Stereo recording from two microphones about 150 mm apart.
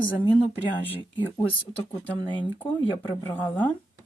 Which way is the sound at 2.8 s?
30° left (ahead or behind).